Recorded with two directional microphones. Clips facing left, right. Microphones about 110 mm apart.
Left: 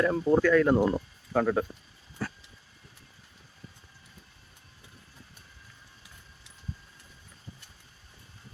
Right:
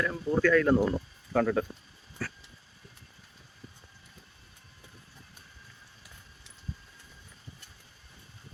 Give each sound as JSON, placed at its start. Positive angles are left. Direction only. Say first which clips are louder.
{"t": 0.0, "sound": "speech", "louder": "left 6 dB", "side_deg": 35}
{"t": 0.3, "sound": "speech", "louder": "even", "side_deg": 10}
{"t": 2.2, "sound": "dog", "louder": "left 2 dB", "side_deg": 20}